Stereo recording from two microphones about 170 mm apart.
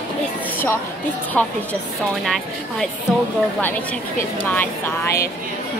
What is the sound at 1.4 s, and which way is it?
Speech, 5° left (ahead or behind).